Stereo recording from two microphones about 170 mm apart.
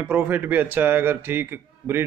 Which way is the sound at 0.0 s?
10° right (ahead or behind).